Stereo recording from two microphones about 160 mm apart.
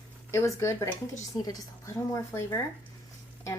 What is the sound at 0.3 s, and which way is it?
A woman's voice, 15° left (ahead or behind).